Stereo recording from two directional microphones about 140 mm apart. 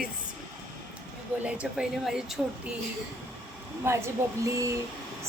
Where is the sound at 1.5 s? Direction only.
5° right (ahead or behind).